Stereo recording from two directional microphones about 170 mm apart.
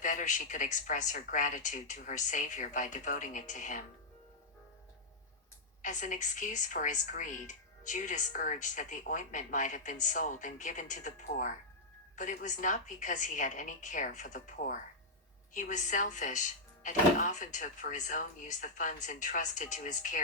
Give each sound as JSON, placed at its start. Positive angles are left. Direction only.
{"t": 0.0, "sound": "speech", "side_deg": 50}
{"t": 5.8, "sound": "speech", "side_deg": 50}